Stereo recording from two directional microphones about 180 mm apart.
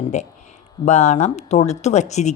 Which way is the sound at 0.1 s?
40° left (ahead or behind).